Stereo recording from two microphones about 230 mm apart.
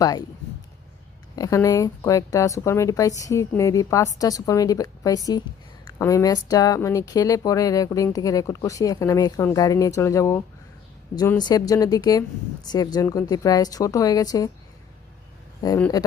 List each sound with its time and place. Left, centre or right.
0.0 s speech: centre
1.4 s speech: centre
15.6 s speech: centre